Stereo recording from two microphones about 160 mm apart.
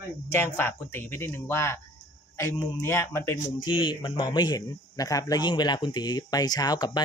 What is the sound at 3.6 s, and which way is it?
Speech, 30° left (ahead or behind).